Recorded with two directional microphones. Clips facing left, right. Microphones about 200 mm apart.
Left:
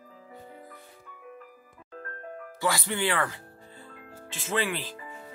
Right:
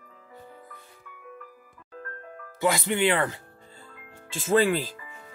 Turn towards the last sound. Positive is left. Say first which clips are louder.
# right 8 dB
turn(degrees=-40)  # may be behind; listen again after turning